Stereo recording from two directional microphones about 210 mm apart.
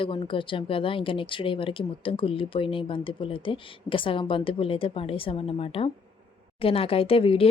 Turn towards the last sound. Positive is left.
turn(degrees=25)  # may be behind; listen again after turning